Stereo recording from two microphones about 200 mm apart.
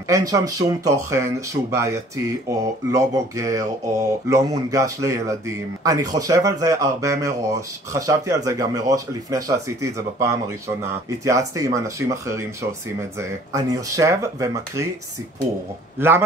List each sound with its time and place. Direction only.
0.1 s speech: 15° right (ahead or behind)